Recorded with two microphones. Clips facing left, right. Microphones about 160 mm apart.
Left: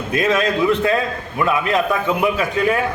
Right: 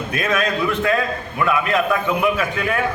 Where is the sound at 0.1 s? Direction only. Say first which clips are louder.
Left 4 dB; 25° left (ahead or behind).